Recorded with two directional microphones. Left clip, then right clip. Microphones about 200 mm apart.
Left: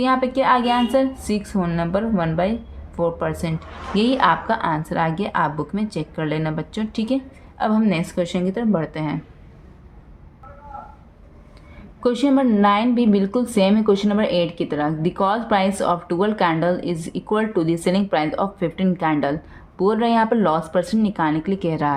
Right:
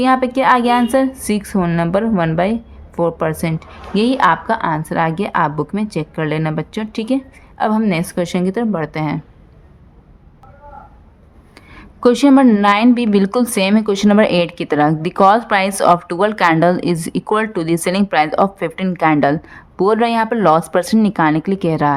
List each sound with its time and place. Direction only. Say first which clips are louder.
0.0 s a woman's voice: right 5 dB; 30° right (ahead or behind)
12.0 s speech: right 8 dB; 35° right (ahead or behind)